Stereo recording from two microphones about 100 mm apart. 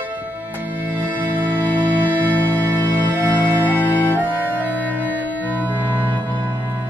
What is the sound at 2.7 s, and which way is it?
Music, 15° right (ahead or behind).